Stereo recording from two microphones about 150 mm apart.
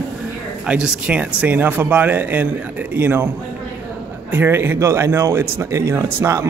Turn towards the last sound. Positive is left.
turn(degrees=-20)  # may be behind; listen again after turning